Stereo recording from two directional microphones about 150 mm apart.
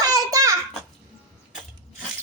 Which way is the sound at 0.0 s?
25° right (ahead or behind).